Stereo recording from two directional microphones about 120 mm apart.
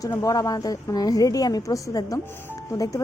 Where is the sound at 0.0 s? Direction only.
30° left (ahead or behind).